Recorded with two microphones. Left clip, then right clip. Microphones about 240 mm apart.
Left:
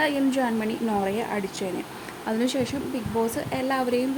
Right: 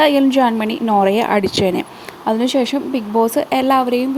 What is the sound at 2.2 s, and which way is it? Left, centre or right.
A woman's voice, right.